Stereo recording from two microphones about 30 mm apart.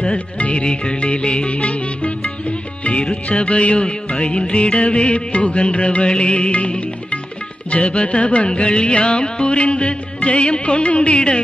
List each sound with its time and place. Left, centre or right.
0.4 s music: left
0.7 s music: left
7.7 s music: left